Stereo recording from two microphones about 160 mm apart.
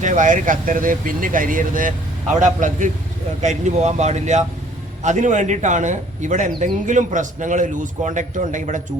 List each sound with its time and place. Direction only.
0.0 s a man's voice: 50° right (ahead or behind)